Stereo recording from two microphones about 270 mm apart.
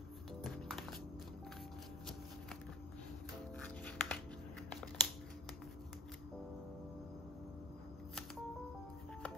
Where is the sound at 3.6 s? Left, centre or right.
Centre.